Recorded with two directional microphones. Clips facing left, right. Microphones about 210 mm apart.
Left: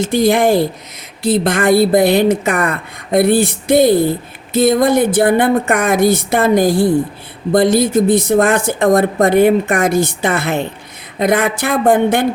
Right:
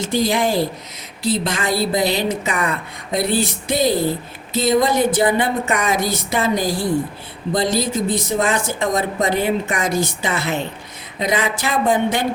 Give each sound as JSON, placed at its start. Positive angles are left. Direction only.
{"t": 0.0, "sound": "speech", "side_deg": 55}